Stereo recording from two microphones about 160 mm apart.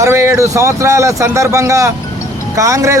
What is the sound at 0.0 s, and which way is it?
A man's voice, 15° right (ahead or behind).